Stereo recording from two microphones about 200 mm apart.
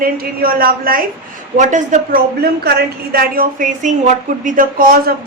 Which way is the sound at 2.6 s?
50° right (ahead or behind).